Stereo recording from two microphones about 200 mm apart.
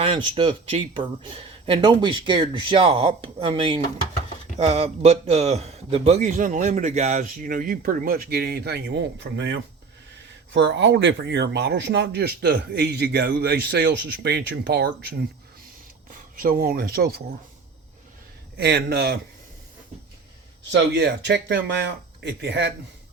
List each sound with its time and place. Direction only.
0.0 s a man's voice: 25° right (ahead or behind); by 15.2 s 55° right (ahead or behind)
16.3 s speech: 45° right (ahead or behind)
18.5 s speech: 55° right (ahead or behind)
20.9 s speech: 60° right (ahead or behind)